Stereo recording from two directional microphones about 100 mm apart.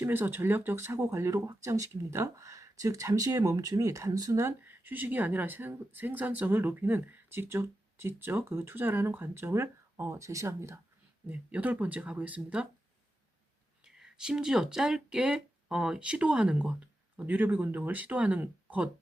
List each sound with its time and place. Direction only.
0.0 s speech: 20° right (ahead or behind)
4.6 s speech: 20° right (ahead or behind)
11.3 s speech: 15° right (ahead or behind)
13.8 s speech: 5° right (ahead or behind)